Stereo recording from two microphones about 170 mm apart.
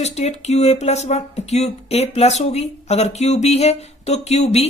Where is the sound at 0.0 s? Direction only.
40° left (ahead or behind).